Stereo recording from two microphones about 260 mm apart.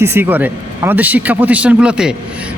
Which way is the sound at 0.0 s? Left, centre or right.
Centre.